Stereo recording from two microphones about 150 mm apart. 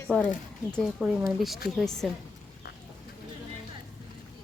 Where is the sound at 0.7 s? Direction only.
5° left (ahead or behind).